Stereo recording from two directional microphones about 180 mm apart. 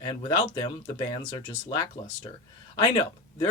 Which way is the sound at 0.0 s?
25° left (ahead or behind).